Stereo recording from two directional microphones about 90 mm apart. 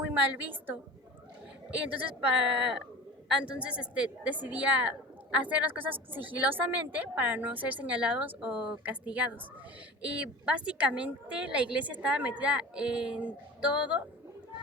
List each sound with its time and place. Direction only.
0.0 s a woman's voice: 20° right (ahead or behind)
3.2 s a woman's voice: 10° right (ahead or behind)